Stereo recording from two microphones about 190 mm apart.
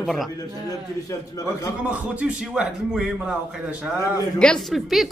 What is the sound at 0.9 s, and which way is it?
Speech, 15° left (ahead or behind).